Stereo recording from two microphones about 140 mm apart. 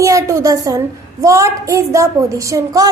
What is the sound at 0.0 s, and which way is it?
A woman's voice, 25° right (ahead or behind).